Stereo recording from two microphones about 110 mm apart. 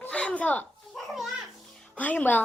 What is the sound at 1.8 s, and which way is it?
Music, 15° left (ahead or behind).